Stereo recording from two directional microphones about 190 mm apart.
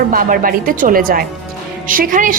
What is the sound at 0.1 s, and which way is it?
A woman's voice, 50° right (ahead or behind).